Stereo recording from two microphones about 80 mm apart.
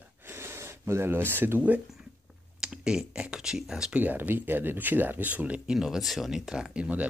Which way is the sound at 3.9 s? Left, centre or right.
Right.